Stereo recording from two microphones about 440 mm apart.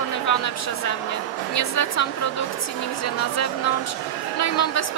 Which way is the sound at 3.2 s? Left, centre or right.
Left.